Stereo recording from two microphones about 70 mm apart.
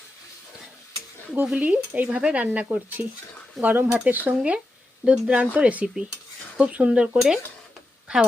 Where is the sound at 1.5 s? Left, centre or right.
Right.